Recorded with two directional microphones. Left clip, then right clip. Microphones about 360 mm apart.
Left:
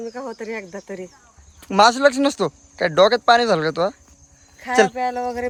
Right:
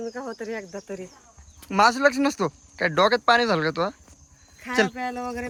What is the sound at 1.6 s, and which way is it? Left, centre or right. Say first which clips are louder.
Speech: left 5 dB; centre.